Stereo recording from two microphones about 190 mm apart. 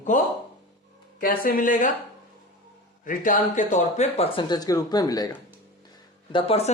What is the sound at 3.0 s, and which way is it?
Speech, 45° left (ahead or behind).